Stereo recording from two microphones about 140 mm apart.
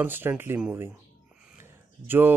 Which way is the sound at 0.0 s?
15° right (ahead or behind).